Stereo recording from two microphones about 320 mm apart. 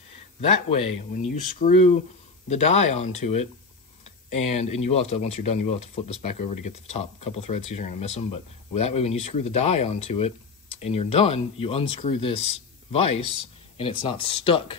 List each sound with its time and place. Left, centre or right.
0.4 s speech: centre